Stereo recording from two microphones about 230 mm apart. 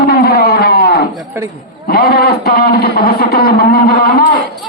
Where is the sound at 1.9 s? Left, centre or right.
Left.